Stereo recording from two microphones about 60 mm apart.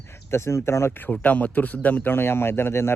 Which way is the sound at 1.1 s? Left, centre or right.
Left.